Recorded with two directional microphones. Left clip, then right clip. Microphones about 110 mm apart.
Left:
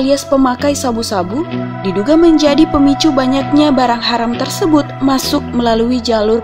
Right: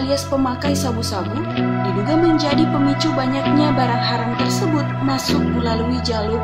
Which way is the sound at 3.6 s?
75° left (ahead or behind).